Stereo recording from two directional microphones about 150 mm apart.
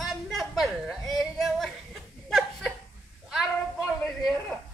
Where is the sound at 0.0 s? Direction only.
Centre (ahead or behind).